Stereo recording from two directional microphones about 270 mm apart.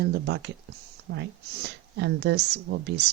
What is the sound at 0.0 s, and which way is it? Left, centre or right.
A woman's voice, right.